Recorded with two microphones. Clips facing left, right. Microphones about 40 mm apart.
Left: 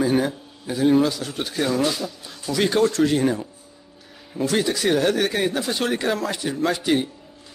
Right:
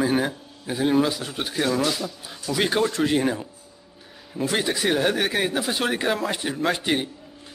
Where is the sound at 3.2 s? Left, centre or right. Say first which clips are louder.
Left 3 dB; centre.